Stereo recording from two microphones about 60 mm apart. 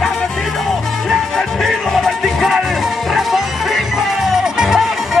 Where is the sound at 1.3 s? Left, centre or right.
Centre.